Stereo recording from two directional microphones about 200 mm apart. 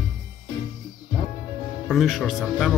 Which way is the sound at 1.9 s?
Centre (ahead or behind).